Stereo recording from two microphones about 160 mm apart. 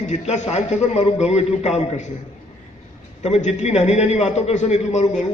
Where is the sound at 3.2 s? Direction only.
45° left (ahead or behind).